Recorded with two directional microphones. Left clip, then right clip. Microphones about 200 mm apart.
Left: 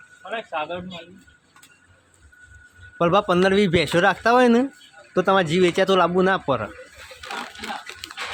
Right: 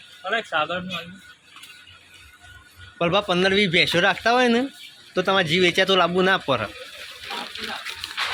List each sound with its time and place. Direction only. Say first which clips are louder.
0.3 s a man's voice: right 4 dB; 50° right (ahead or behind)
3.0 s a man's voice: left 2 dB; 30° left (ahead or behind)
8.0 s water: right 4 dB; 40° left (ahead or behind)